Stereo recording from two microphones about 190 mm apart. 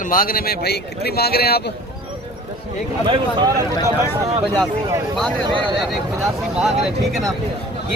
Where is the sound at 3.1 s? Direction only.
20° right (ahead or behind).